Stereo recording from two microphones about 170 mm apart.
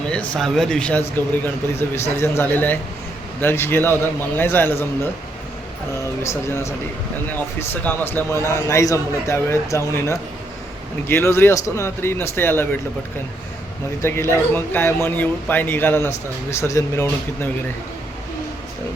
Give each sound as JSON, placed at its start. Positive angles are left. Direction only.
{"t": 0.1, "sound": "speech", "side_deg": 5}
{"t": 6.0, "sound": "speech", "side_deg": 15}
{"t": 14.0, "sound": "speech", "side_deg": 15}